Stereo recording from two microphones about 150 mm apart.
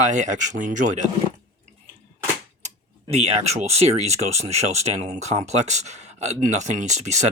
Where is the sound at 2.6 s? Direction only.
45° right (ahead or behind).